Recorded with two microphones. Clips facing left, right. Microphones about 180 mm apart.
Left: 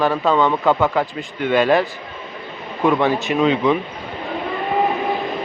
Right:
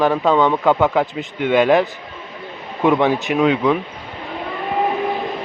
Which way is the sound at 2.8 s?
15° right (ahead or behind).